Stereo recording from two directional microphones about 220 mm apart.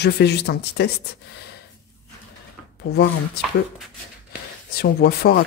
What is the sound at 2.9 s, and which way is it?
Speech, 50° left (ahead or behind).